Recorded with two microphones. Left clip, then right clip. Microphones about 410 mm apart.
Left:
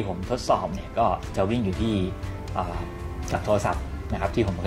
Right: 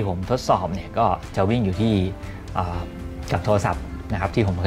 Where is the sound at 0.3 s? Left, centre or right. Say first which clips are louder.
Right 3 dB; right.